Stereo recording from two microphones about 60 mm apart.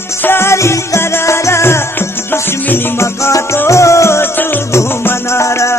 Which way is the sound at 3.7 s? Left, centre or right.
Left.